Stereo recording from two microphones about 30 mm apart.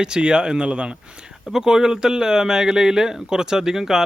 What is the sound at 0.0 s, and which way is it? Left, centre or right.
Speech, right.